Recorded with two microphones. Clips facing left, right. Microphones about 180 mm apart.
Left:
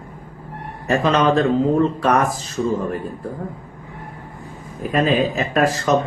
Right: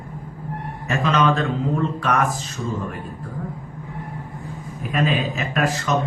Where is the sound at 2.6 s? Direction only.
50° left (ahead or behind).